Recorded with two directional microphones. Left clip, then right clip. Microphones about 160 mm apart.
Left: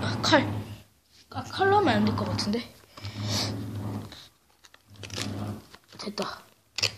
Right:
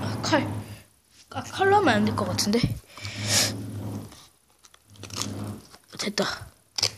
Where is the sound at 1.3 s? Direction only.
30° right (ahead or behind); by 3.5 s 45° right (ahead or behind).